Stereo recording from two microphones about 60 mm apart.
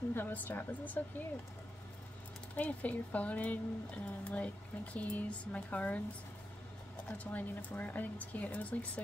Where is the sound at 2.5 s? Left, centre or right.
Left.